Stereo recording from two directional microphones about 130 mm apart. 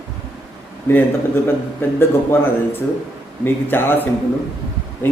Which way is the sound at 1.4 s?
15° left (ahead or behind).